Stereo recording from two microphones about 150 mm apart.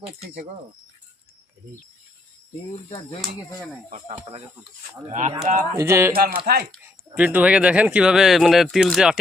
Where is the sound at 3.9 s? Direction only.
50° right (ahead or behind).